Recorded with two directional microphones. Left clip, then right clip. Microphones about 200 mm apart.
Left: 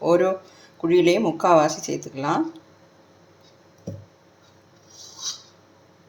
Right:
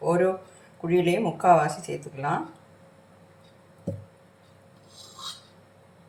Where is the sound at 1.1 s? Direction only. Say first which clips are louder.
Left 2 dB; 45° left (ahead or behind).